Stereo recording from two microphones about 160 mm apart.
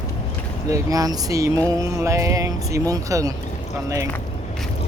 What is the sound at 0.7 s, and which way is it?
Speech, 20° right (ahead or behind).